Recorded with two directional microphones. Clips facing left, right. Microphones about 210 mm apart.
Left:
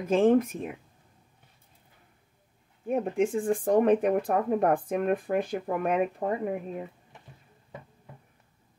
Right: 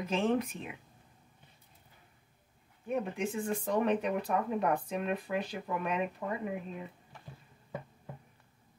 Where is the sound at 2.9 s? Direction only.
50° left (ahead or behind).